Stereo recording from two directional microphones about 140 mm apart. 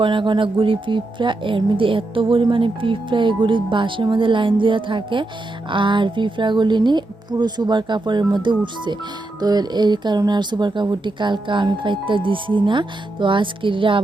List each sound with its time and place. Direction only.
0.0 s speech: 35° right (ahead or behind)